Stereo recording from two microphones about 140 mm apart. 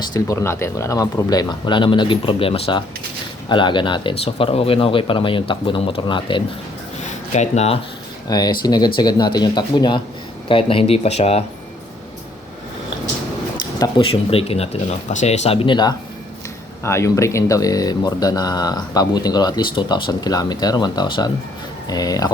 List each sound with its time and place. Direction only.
0.1 s speech: 20° left (ahead or behind)
7.3 s speech: 50° left (ahead or behind)
8.3 s speech: 30° left (ahead or behind); by 11.4 s 50° left (ahead or behind)
14.0 s speech: 40° left (ahead or behind)
15.6 s speech: 30° left (ahead or behind)
16.8 s speech: 20° left (ahead or behind)